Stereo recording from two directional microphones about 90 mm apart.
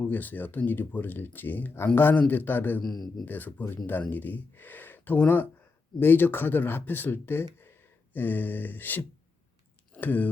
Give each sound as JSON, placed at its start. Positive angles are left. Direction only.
{"t": 0.0, "sound": "speech", "side_deg": 20}
{"t": 2.8, "sound": "a man's voice", "side_deg": 0}
{"t": 3.2, "sound": "speech", "side_deg": 20}